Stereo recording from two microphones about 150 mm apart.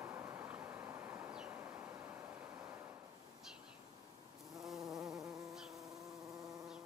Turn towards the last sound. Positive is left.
turn(degrees=0)  # may be behind; listen again after turning